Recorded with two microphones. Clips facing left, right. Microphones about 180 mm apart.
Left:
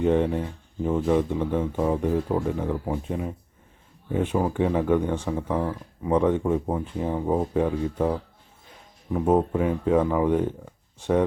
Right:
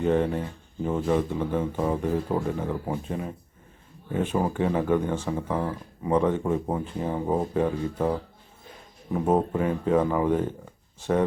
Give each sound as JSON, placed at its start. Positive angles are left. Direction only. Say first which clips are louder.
{"t": 0.0, "sound": "speech", "louder": "left 2 dB", "side_deg": 15}
{"t": 4.4, "sound": "speech", "louder": "left 1 dB", "side_deg": 0}
{"t": 6.4, "sound": "speech", "louder": "left 2 dB", "side_deg": 0}
{"t": 6.8, "sound": "speech", "louder": "left 2 dB", "side_deg": 15}